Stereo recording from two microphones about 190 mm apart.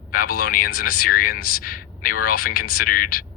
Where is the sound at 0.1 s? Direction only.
50° left (ahead or behind).